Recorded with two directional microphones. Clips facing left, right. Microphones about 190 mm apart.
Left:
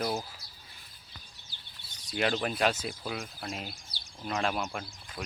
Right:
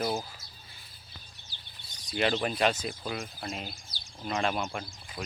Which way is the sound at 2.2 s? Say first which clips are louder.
Right 1 dB; centre (ahead or behind).